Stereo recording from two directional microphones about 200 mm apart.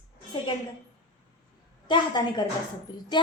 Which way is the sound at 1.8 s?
20° left (ahead or behind).